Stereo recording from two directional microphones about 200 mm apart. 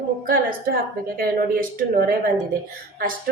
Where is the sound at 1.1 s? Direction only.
45° right (ahead or behind).